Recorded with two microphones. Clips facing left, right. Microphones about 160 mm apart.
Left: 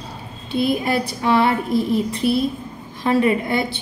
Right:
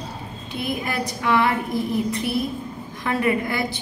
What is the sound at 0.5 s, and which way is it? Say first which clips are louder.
A woman's voice: left 7 dB; 30° left (ahead or behind).